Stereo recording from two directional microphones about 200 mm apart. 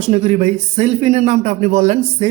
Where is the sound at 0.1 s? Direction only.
30° right (ahead or behind).